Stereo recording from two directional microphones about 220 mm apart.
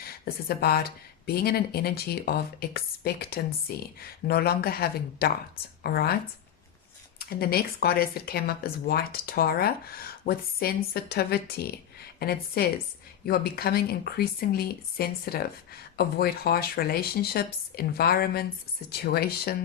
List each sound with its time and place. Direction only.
0.0 s speech: 45° left (ahead or behind)
7.2 s speech: 45° left (ahead or behind)